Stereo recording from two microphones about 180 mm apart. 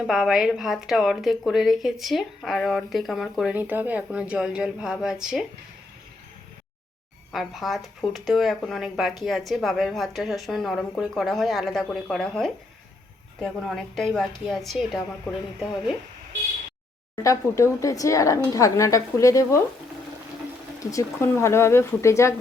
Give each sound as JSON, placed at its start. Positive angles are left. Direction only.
{"t": 0.1, "sound": "a woman's voice", "side_deg": 0}
{"t": 7.3, "sound": "a woman's voice", "side_deg": 0}
{"t": 17.2, "sound": "speech", "side_deg": 15}
{"t": 20.7, "sound": "speech", "side_deg": 15}